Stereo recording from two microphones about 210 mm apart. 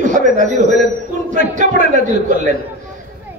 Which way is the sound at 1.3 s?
35° right (ahead or behind).